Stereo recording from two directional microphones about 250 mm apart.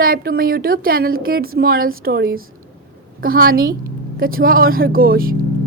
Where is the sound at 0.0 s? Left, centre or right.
Right.